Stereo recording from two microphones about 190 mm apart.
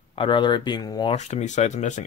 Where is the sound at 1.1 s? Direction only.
40° left (ahead or behind).